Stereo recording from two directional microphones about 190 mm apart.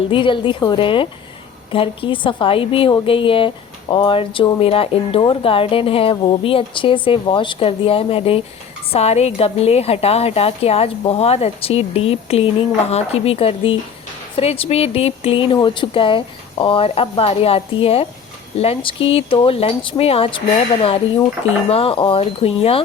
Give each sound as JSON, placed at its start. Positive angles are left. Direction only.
{"t": 0.1, "sound": "a woman's voice", "side_deg": 25}
{"t": 21.7, "sound": "a woman's voice", "side_deg": 30}